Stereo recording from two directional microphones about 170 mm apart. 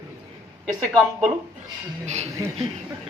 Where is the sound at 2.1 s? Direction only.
40° right (ahead or behind).